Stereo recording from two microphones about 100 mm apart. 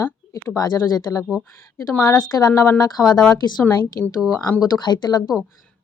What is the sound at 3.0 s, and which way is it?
Speech, 5° left (ahead or behind).